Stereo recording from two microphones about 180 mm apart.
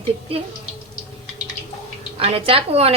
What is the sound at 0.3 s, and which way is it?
Speech, 30° right (ahead or behind).